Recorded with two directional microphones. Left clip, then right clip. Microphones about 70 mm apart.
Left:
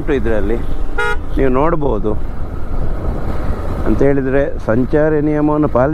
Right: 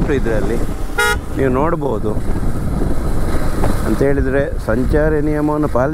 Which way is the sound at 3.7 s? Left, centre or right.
Right.